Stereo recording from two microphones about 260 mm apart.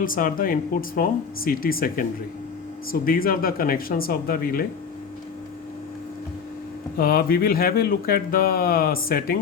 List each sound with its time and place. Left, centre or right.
0.0 s speech: left
6.9 s speech: left